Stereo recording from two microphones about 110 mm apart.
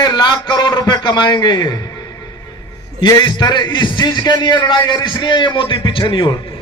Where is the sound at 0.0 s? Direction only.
45° left (ahead or behind).